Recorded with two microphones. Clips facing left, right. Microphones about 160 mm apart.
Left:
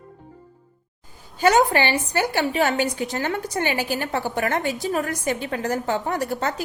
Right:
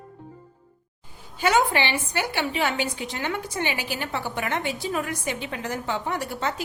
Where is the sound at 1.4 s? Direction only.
40° left (ahead or behind).